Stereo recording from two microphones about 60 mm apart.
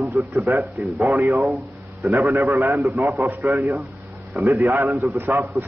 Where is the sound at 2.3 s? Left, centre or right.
Right.